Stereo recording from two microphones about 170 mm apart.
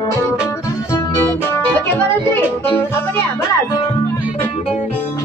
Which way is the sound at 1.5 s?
15° left (ahead or behind).